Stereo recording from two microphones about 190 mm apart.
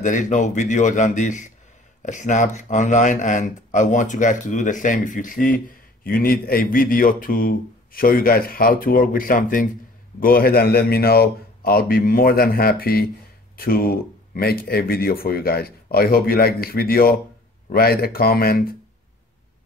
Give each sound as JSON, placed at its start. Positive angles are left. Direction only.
{"t": 0.0, "sound": "speech", "side_deg": 40}